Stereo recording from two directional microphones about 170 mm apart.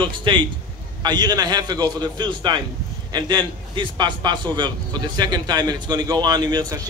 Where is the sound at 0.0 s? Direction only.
30° right (ahead or behind).